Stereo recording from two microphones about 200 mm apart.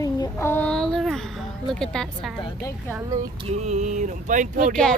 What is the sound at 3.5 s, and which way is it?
Speech, 35° right (ahead or behind).